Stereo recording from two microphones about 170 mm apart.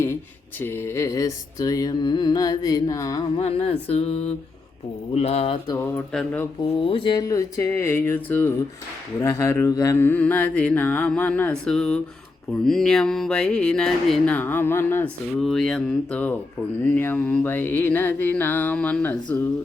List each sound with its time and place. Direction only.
0.6 s music: 15° left (ahead or behind)
3.3 s speech: 35° left (ahead or behind)
5.1 s speech: 35° left (ahead or behind)
6.9 s mantra: 30° left (ahead or behind); by 11.9 s 5° left (ahead or behind)
12.6 s music: 5° left (ahead or behind)
15.4 s music: centre (ahead or behind)
16.8 s mantra: 10° left (ahead or behind)